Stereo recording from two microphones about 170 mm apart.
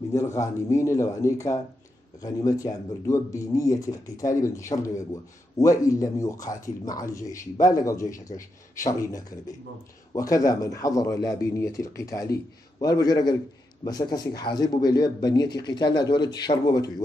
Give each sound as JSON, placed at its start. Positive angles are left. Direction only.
{"t": 0.1, "sound": "speech", "side_deg": 15}